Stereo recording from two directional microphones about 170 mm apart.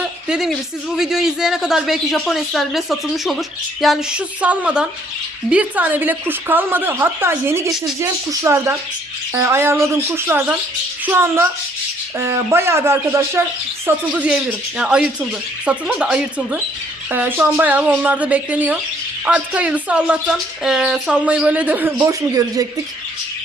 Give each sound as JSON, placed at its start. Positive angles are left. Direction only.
{"t": 0.0, "sound": "a sound", "side_deg": -5}
{"t": 0.9, "sound": "speech", "side_deg": -5}
{"t": 21.9, "sound": "speech", "side_deg": -20}